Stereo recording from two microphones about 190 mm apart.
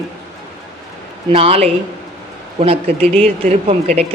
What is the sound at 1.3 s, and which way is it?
A man's voice, 30° right (ahead or behind).